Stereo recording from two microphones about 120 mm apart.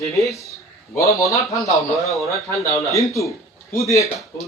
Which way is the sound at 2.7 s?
25° left (ahead or behind).